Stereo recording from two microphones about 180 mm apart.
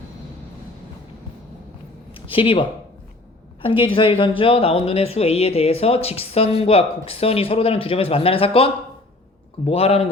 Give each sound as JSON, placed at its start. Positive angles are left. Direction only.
{"t": 2.1, "sound": "speech", "side_deg": 30}